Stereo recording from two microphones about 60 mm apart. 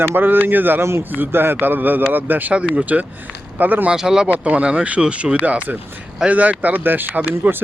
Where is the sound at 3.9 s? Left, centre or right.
Centre.